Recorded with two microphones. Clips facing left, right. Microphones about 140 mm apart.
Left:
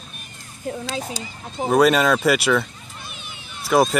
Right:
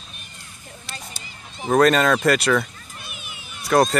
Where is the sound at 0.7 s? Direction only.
90° left.